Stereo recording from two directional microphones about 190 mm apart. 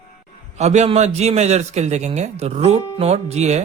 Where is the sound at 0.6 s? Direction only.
35° right (ahead or behind).